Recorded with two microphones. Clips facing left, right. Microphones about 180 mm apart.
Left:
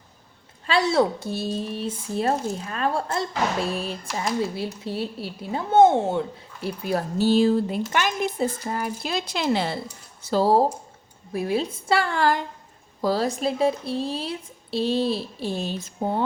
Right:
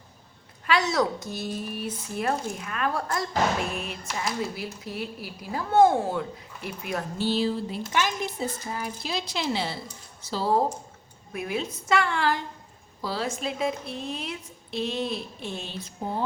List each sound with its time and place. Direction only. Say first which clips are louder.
0.7 s speech: left 4 dB; 30° left (ahead or behind); by 10.5 s 50° left (ahead or behind)
11.3 s speech: left 6 dB; 30° left (ahead or behind)